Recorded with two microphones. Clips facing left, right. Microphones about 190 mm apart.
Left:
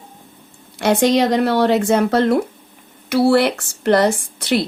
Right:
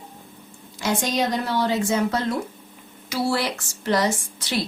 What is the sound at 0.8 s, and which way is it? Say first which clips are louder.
Speech: left 9 dB; 65° left (ahead or behind).